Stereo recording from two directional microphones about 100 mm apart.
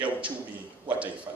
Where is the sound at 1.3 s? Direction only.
30° right (ahead or behind).